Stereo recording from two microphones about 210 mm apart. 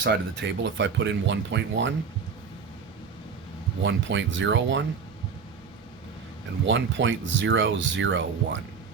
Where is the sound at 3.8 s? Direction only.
60° right (ahead or behind).